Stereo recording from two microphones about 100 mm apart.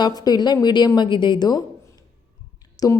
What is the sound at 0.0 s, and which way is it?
A woman's voice, 40° left (ahead or behind).